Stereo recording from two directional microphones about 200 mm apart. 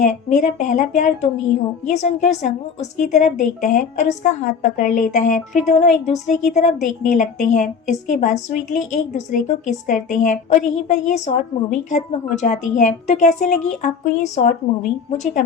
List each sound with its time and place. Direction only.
0.0 s a woman's voice: 35° left (ahead or behind)